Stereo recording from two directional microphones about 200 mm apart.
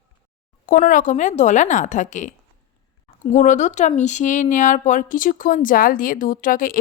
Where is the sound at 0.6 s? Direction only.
45° left (ahead or behind).